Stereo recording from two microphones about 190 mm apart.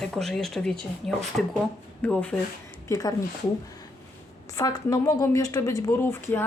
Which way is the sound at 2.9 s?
20° left (ahead or behind).